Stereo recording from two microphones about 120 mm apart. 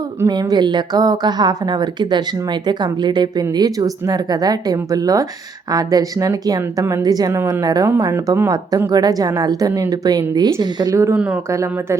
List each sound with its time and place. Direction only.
0.3 s a woman's voice: 35° right (ahead or behind)